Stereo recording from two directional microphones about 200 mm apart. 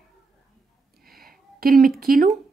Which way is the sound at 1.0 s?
45° right (ahead or behind).